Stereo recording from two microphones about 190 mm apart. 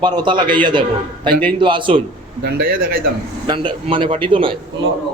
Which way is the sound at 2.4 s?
55° right (ahead or behind).